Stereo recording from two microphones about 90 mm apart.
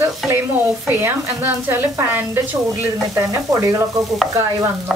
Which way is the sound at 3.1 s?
35° right (ahead or behind).